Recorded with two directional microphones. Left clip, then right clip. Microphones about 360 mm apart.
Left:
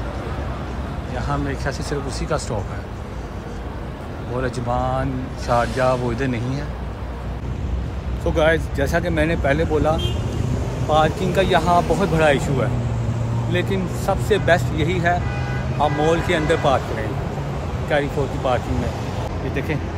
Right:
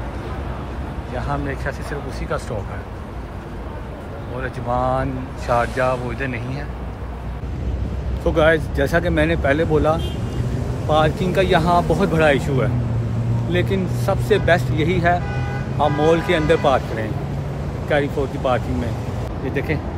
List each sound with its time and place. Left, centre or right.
1.1 s speech: centre
4.4 s speech: centre
8.4 s speech: centre
17.8 s speech: centre